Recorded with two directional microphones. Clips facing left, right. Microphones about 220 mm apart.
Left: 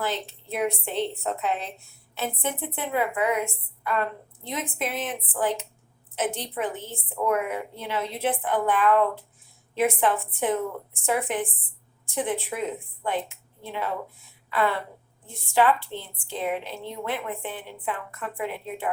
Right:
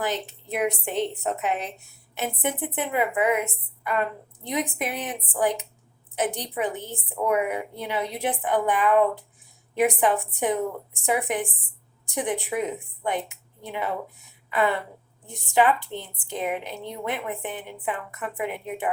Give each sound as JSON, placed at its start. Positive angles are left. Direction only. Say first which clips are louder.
{"t": 0.0, "sound": "a woman's voice", "louder": "right 1 dB", "side_deg": -15}
{"t": 4.4, "sound": "a woman's voice", "louder": "right 3 dB", "side_deg": -15}